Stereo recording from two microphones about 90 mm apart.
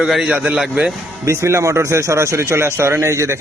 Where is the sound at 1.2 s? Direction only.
30° right (ahead or behind).